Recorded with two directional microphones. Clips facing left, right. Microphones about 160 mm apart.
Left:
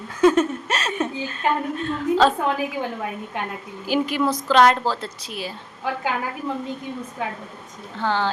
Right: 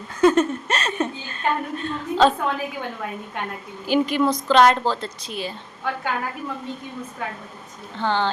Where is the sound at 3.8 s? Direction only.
5° left (ahead or behind).